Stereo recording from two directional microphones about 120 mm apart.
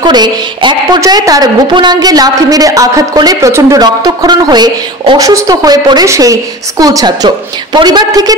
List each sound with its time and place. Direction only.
0.0 s a woman's voice: 35° right (ahead or behind)
1.0 s a woman's voice: 30° right (ahead or behind)